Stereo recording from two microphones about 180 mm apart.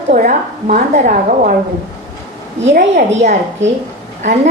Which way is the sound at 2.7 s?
45° right (ahead or behind).